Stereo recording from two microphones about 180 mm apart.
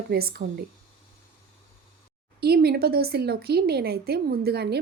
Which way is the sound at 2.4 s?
60° right (ahead or behind).